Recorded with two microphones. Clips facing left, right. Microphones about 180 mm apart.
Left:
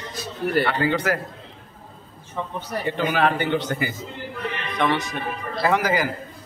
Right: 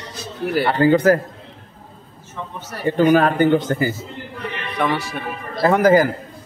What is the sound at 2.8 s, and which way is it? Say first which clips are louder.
A man's voice: right 8 dB; 45° right (ahead or behind).